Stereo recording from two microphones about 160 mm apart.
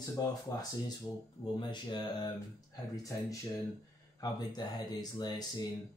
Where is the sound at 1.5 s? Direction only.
30° left (ahead or behind).